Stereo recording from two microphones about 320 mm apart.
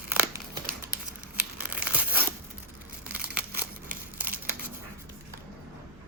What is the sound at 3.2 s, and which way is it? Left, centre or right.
Crumpling, centre.